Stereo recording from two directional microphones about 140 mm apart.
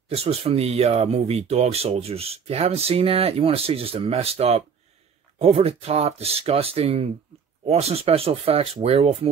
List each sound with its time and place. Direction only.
0.1 s speech: 45° right (ahead or behind)